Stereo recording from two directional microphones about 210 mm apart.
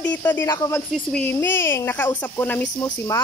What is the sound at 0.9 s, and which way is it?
Speech, 5° left (ahead or behind).